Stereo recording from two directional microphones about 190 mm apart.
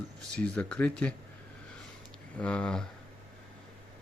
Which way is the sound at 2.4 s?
5° left (ahead or behind).